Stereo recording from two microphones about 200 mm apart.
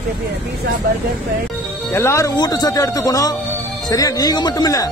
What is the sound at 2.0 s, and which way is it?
Speech, 15° left (ahead or behind).